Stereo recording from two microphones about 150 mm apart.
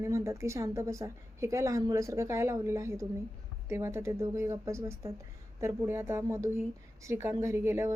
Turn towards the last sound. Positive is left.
turn(degrees=-15)  # may be behind; listen again after turning